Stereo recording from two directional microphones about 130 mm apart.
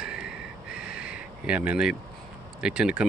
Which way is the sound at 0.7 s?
10° right (ahead or behind).